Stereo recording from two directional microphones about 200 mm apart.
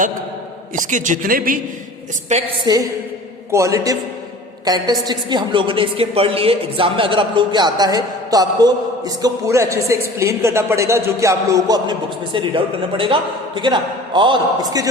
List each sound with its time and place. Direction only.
0.8 s speech: 40° right (ahead or behind)
2.7 s a woman's voice: 20° right (ahead or behind)